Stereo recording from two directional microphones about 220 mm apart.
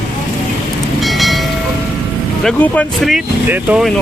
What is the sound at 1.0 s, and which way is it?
Train, centre (ahead or behind).